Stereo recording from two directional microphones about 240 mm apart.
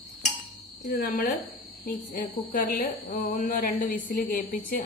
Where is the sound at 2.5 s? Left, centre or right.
Left.